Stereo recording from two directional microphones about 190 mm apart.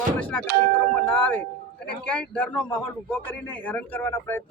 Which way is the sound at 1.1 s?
10° left (ahead or behind).